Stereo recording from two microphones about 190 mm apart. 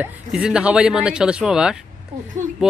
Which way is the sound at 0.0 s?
5° right (ahead or behind).